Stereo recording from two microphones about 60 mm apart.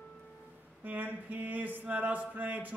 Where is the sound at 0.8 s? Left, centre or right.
Right.